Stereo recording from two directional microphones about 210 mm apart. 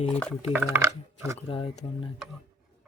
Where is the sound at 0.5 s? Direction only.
10° right (ahead or behind).